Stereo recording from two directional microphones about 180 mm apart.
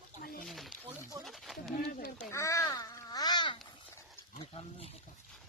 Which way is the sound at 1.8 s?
55° left (ahead or behind).